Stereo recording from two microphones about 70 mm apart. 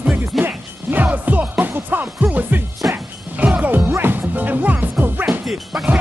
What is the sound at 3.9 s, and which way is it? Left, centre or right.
Music, right.